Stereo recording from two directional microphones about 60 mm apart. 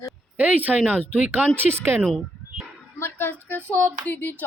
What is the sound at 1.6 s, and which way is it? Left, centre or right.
Speech, right.